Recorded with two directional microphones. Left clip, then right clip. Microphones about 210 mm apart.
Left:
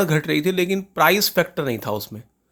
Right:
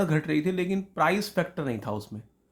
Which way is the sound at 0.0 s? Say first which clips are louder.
Left 7 dB; 35° left (ahead or behind).